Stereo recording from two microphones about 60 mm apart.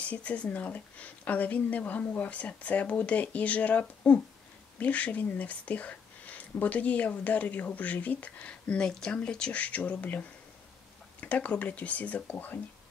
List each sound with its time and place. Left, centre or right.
0.0 s speech: left